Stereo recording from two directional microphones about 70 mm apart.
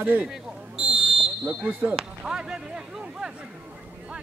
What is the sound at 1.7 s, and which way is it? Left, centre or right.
Speech, right.